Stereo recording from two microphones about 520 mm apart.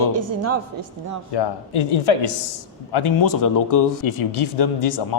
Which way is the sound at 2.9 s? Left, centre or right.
Left.